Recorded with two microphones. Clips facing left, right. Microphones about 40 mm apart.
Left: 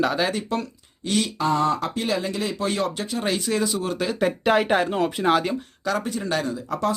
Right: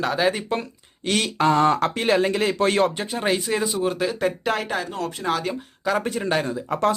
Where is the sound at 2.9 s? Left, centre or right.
Right.